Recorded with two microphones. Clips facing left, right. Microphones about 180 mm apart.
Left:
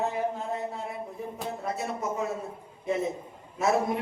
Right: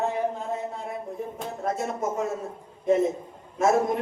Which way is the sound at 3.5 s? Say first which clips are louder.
Right 4 dB; 45° right (ahead or behind).